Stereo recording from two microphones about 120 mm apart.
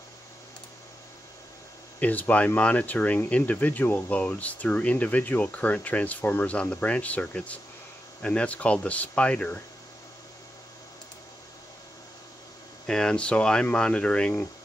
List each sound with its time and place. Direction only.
2.0 s speech: 15° left (ahead or behind)
12.8 s speech: 5° left (ahead or behind)